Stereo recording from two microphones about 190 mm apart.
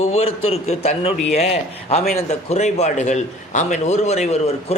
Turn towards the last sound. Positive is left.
turn(degrees=35)  # may be behind; listen again after turning